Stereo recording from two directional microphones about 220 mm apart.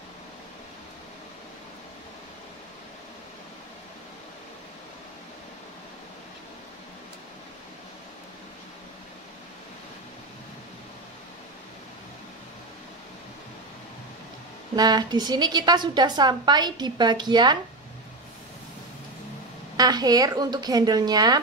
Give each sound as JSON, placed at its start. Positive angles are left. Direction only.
{"t": 14.8, "sound": "a woman's voice", "side_deg": -20}
{"t": 19.8, "sound": "speech", "side_deg": -20}